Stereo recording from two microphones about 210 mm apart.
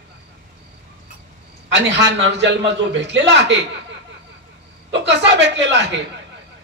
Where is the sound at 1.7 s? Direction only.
60° right (ahead or behind).